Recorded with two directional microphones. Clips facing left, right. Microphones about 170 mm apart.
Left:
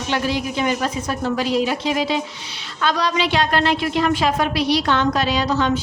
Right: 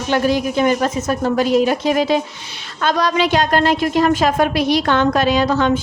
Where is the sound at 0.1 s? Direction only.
50° right (ahead or behind).